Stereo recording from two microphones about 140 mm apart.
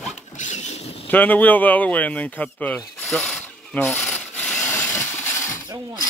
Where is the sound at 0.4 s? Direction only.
60° left (ahead or behind).